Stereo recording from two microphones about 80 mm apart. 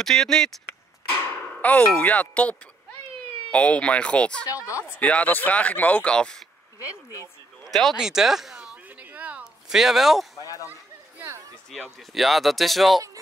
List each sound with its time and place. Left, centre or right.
0.0 s speech: centre
1.1 s speech: left
4.6 s speech: left
4.9 s speech: centre
8.0 s speech: centre
8.8 s a sound: centre
9.7 s speech: centre
10.3 s a sound: left
12.0 s speech: centre